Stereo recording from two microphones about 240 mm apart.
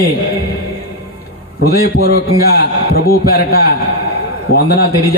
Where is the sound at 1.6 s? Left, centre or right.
Left.